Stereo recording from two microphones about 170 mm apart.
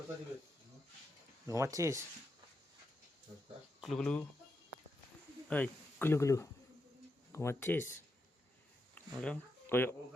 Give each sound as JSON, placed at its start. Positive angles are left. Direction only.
{"t": 1.5, "sound": "speech", "side_deg": -20}
{"t": 3.8, "sound": "speech", "side_deg": 0}
{"t": 5.5, "sound": "speech", "side_deg": 10}
{"t": 9.0, "sound": "a sound", "side_deg": 10}